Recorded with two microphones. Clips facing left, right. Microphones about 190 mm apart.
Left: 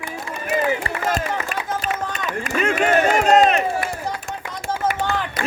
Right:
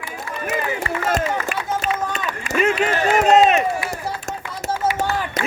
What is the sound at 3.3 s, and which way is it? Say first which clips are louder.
Run: right 1 dB; 5° right (ahead or behind).